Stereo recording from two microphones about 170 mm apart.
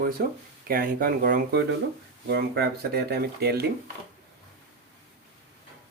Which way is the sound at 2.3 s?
70° right (ahead or behind).